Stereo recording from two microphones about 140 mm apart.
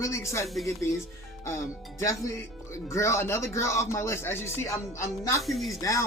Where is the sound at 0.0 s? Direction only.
20° left (ahead or behind).